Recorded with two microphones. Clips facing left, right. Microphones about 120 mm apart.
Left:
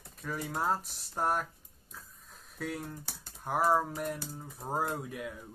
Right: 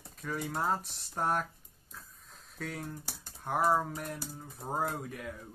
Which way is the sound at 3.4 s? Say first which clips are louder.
Left 1 dB; 5° left (ahead or behind).